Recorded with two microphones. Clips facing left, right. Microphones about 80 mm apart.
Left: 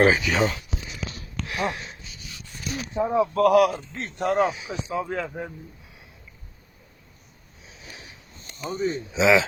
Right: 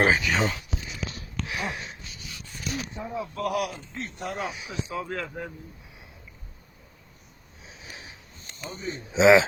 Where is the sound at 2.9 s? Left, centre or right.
Left.